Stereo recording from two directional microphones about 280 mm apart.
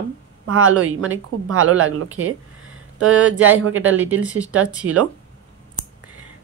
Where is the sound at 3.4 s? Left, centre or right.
Right.